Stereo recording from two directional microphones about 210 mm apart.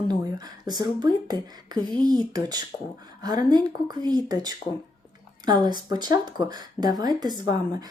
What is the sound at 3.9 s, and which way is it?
Speech, 20° right (ahead or behind).